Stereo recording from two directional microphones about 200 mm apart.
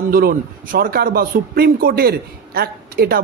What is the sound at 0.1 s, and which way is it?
Speech, 45° right (ahead or behind).